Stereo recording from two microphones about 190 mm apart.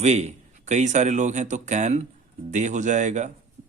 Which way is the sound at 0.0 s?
35° right (ahead or behind).